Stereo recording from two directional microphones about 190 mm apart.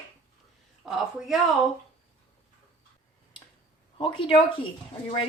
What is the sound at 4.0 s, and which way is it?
Speech, 25° left (ahead or behind).